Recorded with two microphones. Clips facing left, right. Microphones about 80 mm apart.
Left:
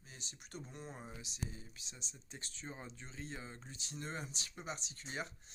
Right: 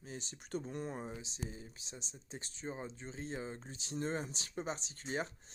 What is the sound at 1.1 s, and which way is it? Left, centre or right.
Speech, right.